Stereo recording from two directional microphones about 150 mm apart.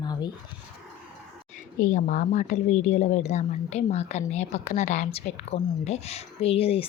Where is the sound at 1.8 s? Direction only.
60° left (ahead or behind).